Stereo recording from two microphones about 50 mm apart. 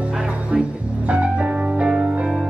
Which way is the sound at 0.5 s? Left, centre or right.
Centre.